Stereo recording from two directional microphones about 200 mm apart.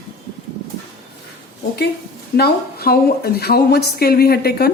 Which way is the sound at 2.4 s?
50° left (ahead or behind).